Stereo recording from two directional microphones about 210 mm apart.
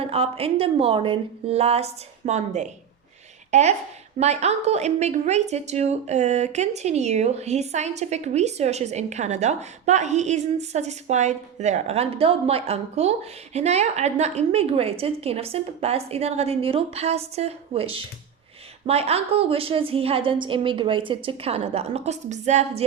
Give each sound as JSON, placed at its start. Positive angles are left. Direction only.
{"t": 0.0, "sound": "a woman's voice", "side_deg": -30}